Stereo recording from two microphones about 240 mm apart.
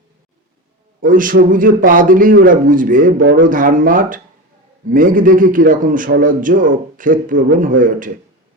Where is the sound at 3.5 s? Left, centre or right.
Right.